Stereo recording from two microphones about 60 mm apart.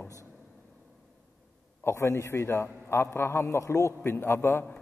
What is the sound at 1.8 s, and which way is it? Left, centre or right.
A man's voice, left.